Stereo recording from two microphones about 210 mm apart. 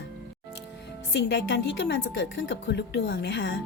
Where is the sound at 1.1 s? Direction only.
55° left (ahead or behind).